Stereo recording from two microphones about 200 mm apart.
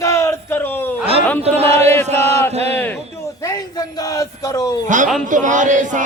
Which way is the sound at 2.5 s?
30° right (ahead or behind).